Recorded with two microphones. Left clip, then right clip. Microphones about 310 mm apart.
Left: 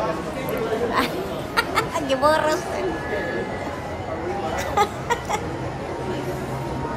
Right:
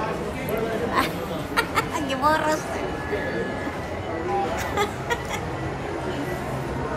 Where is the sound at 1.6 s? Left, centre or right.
Centre.